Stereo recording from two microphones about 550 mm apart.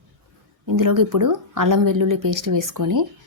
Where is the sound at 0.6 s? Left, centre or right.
Right.